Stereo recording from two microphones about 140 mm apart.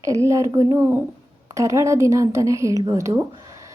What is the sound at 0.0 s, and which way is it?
A woman's voice, 20° right (ahead or behind).